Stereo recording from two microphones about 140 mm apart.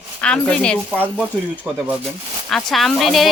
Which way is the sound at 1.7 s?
10° right (ahead or behind).